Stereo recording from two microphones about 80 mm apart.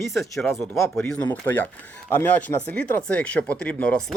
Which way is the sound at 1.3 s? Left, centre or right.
Left.